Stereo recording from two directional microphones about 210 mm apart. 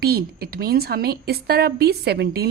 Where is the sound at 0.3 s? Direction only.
45° right (ahead or behind).